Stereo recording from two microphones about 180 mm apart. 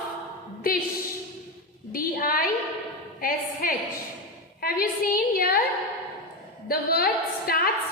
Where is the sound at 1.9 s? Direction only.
55° left (ahead or behind).